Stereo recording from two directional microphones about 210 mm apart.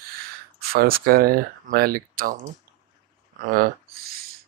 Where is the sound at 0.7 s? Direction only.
45° right (ahead or behind).